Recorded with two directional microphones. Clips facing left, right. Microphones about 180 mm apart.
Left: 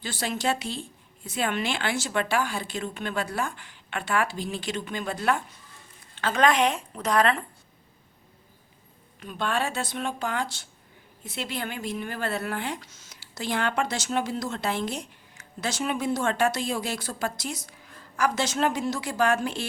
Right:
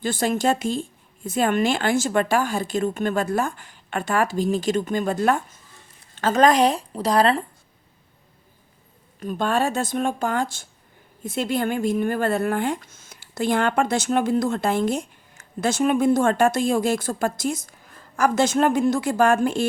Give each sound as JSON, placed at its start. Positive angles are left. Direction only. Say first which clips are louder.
{"t": 0.0, "sound": "speech", "louder": "right 7 dB", "side_deg": -50}
{"t": 9.2, "sound": "speech", "louder": "right 6 dB", "side_deg": -45}